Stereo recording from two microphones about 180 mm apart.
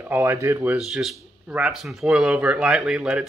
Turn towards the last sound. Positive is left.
turn(degrees=-5)  # may be behind; listen again after turning